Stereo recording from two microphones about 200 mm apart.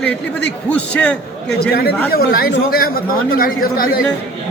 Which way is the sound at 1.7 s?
50° left (ahead or behind).